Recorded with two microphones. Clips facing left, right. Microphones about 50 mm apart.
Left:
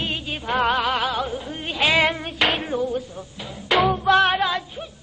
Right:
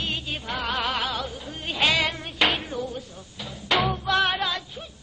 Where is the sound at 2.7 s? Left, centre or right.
Centre.